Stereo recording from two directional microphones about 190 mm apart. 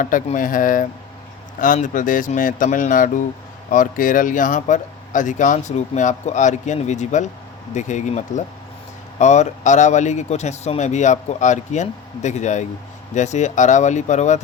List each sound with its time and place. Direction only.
0.0 s speech: 45° left (ahead or behind)